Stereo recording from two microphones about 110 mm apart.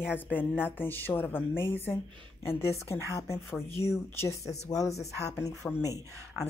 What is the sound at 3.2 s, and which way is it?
A woman's voice, 30° left (ahead or behind).